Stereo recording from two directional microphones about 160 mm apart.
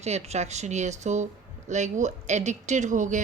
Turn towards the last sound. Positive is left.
turn(degrees=-50)  # may be behind; listen again after turning